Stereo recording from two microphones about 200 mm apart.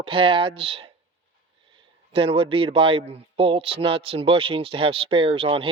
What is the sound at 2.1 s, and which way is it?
Speech, 25° right (ahead or behind).